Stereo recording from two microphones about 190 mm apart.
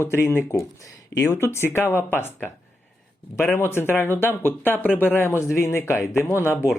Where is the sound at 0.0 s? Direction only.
15° left (ahead or behind).